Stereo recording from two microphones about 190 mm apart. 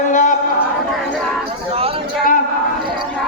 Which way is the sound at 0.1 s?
40° left (ahead or behind).